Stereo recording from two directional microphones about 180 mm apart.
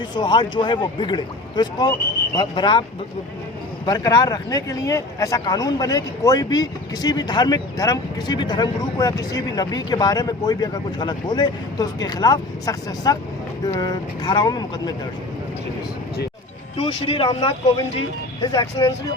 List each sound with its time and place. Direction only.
0.1 s speech: 25° left (ahead or behind)
3.8 s speech: 20° left (ahead or behind)
16.8 s speech: 30° left (ahead or behind)